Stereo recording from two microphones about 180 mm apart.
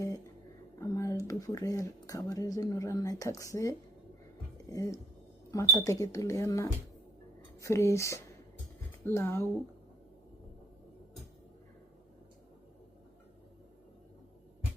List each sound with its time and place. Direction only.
0.8 s speech: 15° left (ahead or behind)